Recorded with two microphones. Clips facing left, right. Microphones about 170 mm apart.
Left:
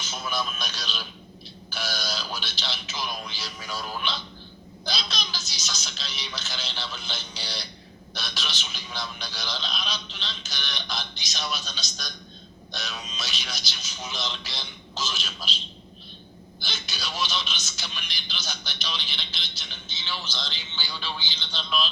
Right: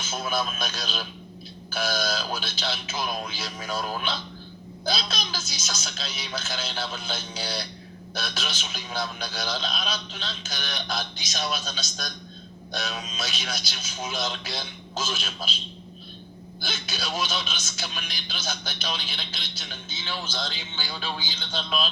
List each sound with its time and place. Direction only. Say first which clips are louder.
0.0 s a man's voice: right 3 dB; 50° right (ahead or behind)
16.6 s a man's voice: right 4 dB; 50° right (ahead or behind)